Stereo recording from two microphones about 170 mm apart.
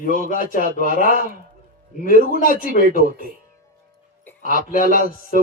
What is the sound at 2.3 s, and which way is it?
Speech, 55° left (ahead or behind).